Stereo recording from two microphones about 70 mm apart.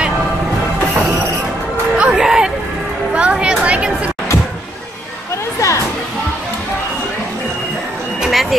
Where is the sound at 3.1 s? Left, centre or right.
Centre.